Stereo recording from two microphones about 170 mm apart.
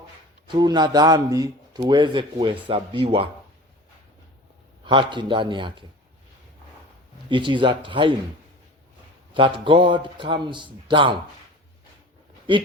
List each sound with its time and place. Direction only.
0.4 s a man's voice: 25° right (ahead or behind)
4.8 s a man's voice: 30° right (ahead or behind)
7.3 s a man's voice: 30° right (ahead or behind)
9.3 s a man's voice: 30° right (ahead or behind)